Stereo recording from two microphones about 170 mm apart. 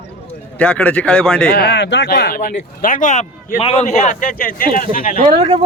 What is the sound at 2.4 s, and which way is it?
A man's voice, 55° left (ahead or behind).